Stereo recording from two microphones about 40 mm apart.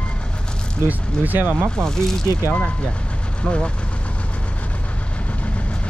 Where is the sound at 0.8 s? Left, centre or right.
Right.